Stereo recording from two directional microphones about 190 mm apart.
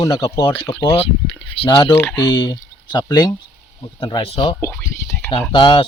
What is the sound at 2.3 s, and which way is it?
Speech, 20° left (ahead or behind).